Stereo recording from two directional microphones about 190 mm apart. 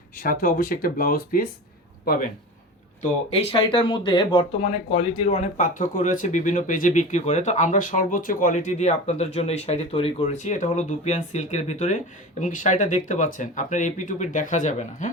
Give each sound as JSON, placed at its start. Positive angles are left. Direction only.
{"t": 0.2, "sound": "speech", "side_deg": 45}
{"t": 3.0, "sound": "speech", "side_deg": 30}